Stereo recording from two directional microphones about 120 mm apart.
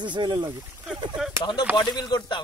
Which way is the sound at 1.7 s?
35° left (ahead or behind).